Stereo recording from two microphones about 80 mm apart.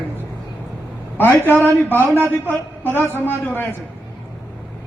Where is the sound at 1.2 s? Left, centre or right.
Left.